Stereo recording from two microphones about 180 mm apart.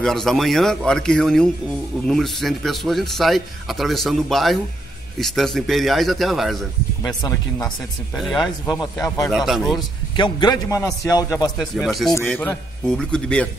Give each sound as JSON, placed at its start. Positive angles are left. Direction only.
{"t": 0.0, "sound": "a man's voice", "side_deg": 0}
{"t": 7.0, "sound": "a man's voice", "side_deg": 15}
{"t": 8.1, "sound": "a man's voice", "side_deg": 0}
{"t": 9.0, "sound": "a man's voice", "side_deg": 20}
{"t": 9.3, "sound": "a man's voice", "side_deg": 0}
{"t": 10.1, "sound": "a man's voice", "side_deg": 25}
{"t": 11.5, "sound": "a man's voice", "side_deg": 0}